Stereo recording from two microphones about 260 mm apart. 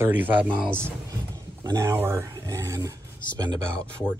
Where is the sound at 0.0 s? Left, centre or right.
Centre.